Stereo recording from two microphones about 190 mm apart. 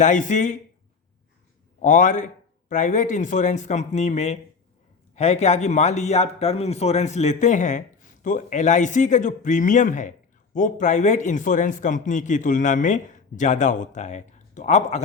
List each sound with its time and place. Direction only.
0.0 s speech: 40° left (ahead or behind)
1.8 s speech: 40° left (ahead or behind)